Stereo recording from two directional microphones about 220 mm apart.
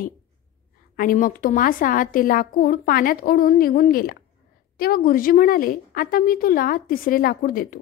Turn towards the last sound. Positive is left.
turn(degrees=40)  # may be behind; listen again after turning